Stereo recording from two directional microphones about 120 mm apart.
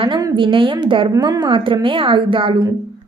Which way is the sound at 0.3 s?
45° right (ahead or behind).